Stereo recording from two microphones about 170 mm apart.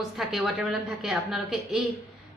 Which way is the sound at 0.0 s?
Centre (ahead or behind).